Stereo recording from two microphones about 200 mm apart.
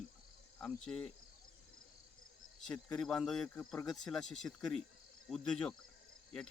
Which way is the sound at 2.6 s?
5° left (ahead or behind).